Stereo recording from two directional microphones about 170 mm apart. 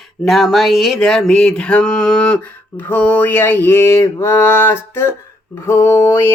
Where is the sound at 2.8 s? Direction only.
10° left (ahead or behind).